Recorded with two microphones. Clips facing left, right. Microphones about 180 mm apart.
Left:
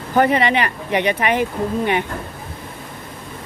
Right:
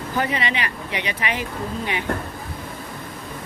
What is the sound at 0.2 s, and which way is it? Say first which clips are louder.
Speech: left 9 dB; 55° left (ahead or behind).